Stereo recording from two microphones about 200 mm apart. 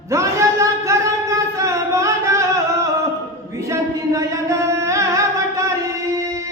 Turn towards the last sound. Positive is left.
turn(degrees=-15)  # may be behind; listen again after turning